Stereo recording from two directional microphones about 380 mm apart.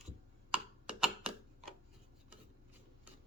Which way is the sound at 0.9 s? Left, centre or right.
Centre.